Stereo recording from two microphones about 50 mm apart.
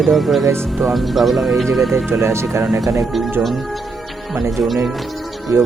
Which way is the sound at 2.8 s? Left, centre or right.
Centre.